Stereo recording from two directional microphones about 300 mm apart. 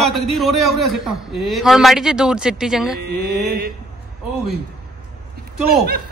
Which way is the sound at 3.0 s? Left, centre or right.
Right.